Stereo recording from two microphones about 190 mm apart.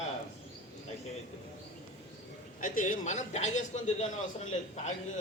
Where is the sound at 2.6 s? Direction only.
45° left (ahead or behind).